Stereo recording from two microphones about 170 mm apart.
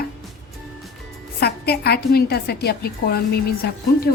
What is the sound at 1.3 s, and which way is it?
A woman's voice, 70° left (ahead or behind).